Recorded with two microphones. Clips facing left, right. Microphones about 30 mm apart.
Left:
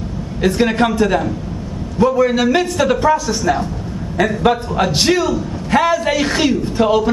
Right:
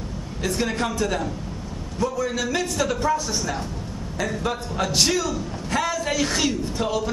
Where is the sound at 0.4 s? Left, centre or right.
Left.